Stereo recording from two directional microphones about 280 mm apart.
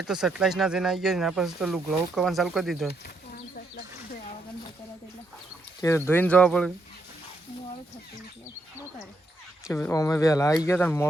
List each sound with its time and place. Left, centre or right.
0.0 s speech: centre
5.8 s speech: centre
9.7 s speech: centre